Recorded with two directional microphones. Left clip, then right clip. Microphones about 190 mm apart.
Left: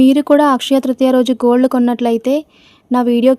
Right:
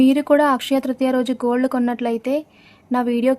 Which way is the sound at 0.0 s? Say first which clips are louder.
Left 5 dB; 35° left (ahead or behind).